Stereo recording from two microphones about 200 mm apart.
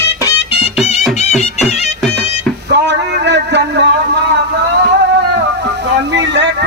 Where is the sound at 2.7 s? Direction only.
60° right (ahead or behind).